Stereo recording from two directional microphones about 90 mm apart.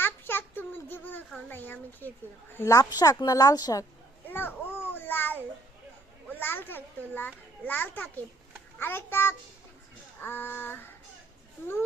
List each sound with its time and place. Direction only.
0.0 s a sound: 25° left (ahead or behind)
2.9 s speech: 45° left (ahead or behind)
4.3 s babbling: 25° left (ahead or behind)
6.2 s a child's voice: 20° left (ahead or behind)
8.8 s child singing: 25° left (ahead or behind)